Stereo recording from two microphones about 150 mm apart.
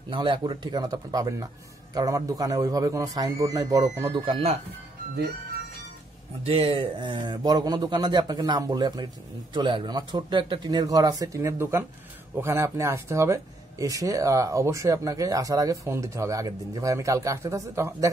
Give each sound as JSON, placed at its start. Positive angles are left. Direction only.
{"t": 0.1, "sound": "speech", "side_deg": -30}
{"t": 6.4, "sound": "speech", "side_deg": -40}